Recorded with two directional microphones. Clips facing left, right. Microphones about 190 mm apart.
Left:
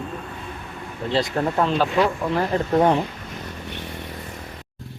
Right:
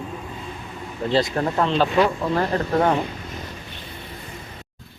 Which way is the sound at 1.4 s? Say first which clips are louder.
Even; 5° left (ahead or behind).